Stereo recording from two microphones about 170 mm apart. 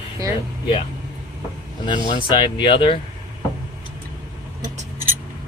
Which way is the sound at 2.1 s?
30° left (ahead or behind).